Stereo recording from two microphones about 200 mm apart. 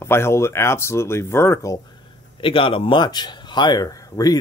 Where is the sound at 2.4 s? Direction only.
25° left (ahead or behind).